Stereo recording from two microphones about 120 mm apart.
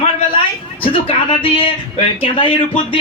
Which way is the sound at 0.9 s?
50° left (ahead or behind).